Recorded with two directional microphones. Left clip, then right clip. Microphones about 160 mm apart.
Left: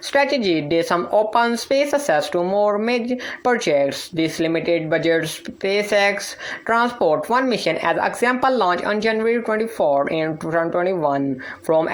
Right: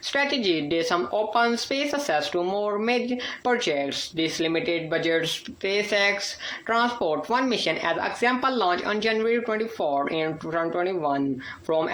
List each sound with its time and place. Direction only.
0.1 s speech: 30° left (ahead or behind)